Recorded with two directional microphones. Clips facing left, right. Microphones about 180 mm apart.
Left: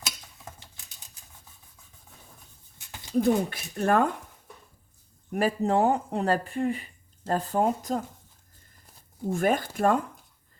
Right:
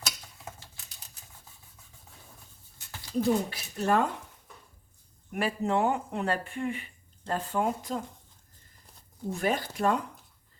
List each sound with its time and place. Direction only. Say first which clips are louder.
2.7 s a sound: left 4 dB; 20° left (ahead or behind)
3.5 s speech: left 2 dB; 55° left (ahead or behind)
5.3 s speech: left 4 dB; 40° left (ahead or behind)
9.3 s speech: left 4 dB; 50° left (ahead or behind)